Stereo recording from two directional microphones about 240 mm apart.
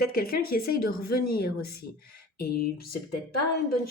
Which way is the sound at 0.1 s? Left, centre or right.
Left.